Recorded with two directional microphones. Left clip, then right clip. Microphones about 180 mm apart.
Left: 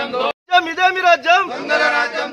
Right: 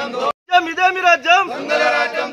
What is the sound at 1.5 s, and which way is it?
Choir, 35° right (ahead or behind).